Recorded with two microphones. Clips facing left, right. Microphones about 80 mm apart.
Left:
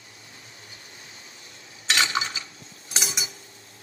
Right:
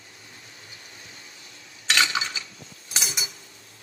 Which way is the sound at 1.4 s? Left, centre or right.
Left.